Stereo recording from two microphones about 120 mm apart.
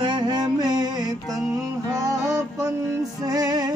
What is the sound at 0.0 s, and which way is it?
Music, 40° right (ahead or behind).